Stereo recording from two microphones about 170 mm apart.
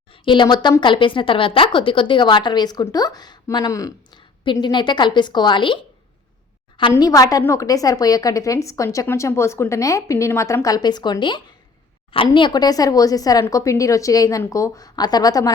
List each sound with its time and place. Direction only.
0.1 s a woman's voice: 30° left (ahead or behind)
6.9 s a woman's voice: 20° left (ahead or behind)